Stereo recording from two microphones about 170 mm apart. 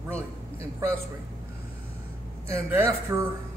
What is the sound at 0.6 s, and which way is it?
Speech, 20° right (ahead or behind).